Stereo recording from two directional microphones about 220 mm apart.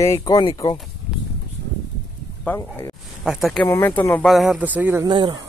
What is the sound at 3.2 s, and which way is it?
Speech, centre (ahead or behind).